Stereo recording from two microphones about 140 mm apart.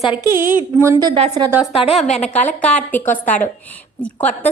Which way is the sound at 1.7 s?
45° left (ahead or behind).